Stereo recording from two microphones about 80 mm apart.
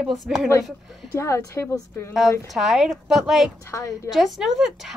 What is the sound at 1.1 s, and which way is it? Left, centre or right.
A woman's voice, left.